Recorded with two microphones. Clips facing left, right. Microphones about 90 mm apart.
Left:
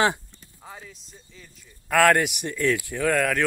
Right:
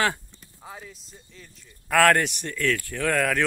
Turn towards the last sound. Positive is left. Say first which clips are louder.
# left 1 dB
turn(degrees=0)  # may be behind; listen again after turning